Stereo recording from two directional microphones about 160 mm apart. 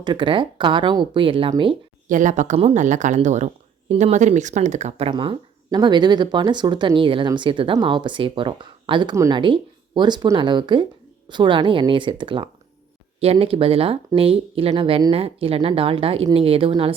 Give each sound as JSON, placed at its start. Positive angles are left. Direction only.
{"t": 0.0, "sound": "speech", "side_deg": -30}
{"t": 2.0, "sound": "speech", "side_deg": -50}